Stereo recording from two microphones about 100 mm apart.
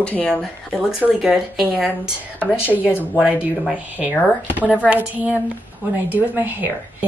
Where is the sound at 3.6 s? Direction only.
15° right (ahead or behind).